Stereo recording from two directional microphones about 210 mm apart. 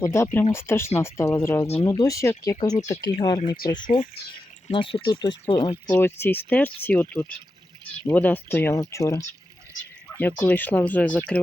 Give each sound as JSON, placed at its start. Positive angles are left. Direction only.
{"t": 0.0, "sound": "speech", "side_deg": 15}
{"t": 3.9, "sound": "speech", "side_deg": 40}
{"t": 4.7, "sound": "speech", "side_deg": 25}
{"t": 5.9, "sound": "speech", "side_deg": 10}
{"t": 10.4, "sound": "speech", "side_deg": 10}